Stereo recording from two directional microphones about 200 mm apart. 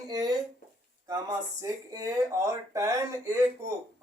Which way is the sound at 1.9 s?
15° right (ahead or behind).